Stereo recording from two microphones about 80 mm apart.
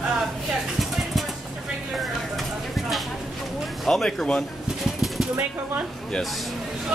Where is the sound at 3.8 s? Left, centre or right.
Centre.